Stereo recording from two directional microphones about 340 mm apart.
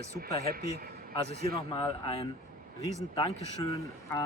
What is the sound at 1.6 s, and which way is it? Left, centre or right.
Speech, centre.